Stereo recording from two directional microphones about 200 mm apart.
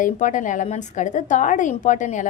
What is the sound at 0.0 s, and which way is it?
Speech, 40° left (ahead or behind).